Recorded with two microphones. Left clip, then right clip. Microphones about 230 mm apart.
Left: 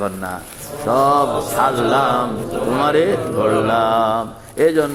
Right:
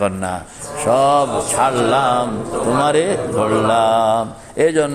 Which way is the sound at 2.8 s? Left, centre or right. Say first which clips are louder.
Left 2 dB; right.